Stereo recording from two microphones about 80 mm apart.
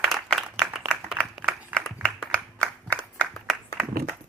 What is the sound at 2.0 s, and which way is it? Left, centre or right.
Clapping, centre.